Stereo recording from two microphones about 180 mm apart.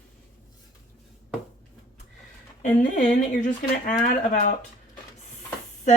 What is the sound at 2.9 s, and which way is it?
Speech, 45° left (ahead or behind).